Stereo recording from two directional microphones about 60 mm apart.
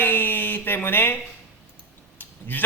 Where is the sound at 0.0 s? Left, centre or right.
Left.